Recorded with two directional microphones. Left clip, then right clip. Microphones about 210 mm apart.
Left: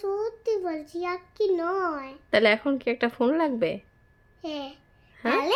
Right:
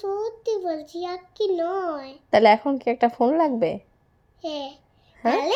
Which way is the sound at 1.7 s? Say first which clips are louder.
Right 1 dB; 10° left (ahead or behind).